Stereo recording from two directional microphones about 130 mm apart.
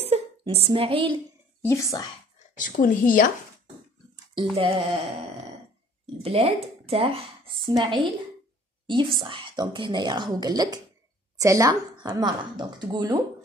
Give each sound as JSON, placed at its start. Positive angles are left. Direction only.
{"t": 0.0, "sound": "a sound", "side_deg": -50}
{"t": 1.6, "sound": "speech", "side_deg": 20}
{"t": 2.5, "sound": "speech", "side_deg": 90}
{"t": 4.6, "sound": "speech", "side_deg": -45}
{"t": 6.2, "sound": "a woman's voice", "side_deg": -50}